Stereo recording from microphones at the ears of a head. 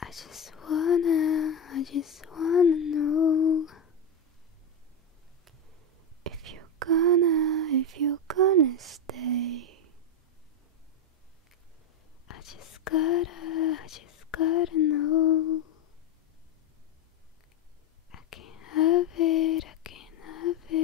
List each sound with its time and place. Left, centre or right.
0.0 s whispering: left
6.2 s whispering: right
12.3 s whispering: left
18.1 s whispering: left